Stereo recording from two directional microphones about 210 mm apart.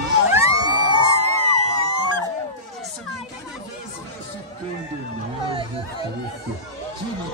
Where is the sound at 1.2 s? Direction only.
90° left.